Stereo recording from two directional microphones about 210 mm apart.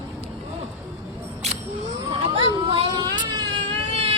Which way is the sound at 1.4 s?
30° right (ahead or behind).